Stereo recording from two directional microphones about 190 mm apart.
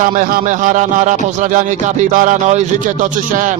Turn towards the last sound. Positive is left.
turn(degrees=-40)  # may be behind; listen again after turning